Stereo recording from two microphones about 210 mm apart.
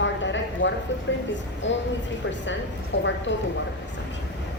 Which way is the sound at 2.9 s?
60° left (ahead or behind).